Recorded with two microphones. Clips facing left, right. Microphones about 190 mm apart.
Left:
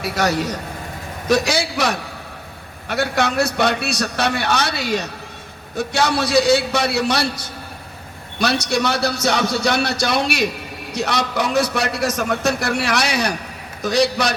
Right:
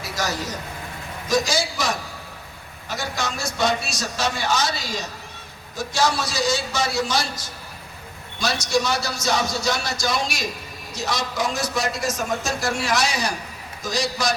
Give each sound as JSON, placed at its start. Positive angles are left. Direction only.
{"t": 0.0, "sound": "a man's voice", "side_deg": 65}